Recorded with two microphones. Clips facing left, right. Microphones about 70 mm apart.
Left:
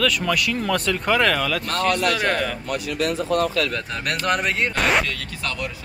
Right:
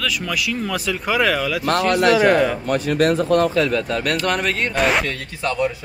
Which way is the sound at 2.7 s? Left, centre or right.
Right.